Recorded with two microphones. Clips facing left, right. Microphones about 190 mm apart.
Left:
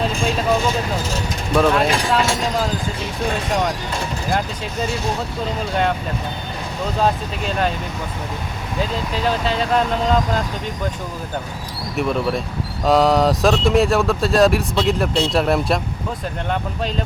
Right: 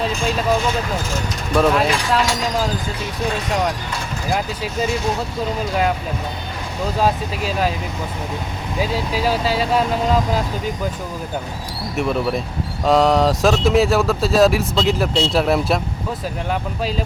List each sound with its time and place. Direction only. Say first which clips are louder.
0.0 s a sound: even; centre (ahead or behind)
1.5 s speech: even; centre (ahead or behind)
4.3 s speech: right 2 dB; 5° right (ahead or behind)
7.0 s speech: even; 5° right (ahead or behind)
8.8 s speech: right 1 dB; 5° right (ahead or behind)
11.9 s speech: even; centre (ahead or behind)